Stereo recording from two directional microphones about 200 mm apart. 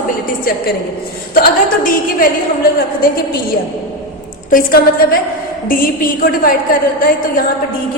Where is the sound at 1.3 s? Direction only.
45° left (ahead or behind).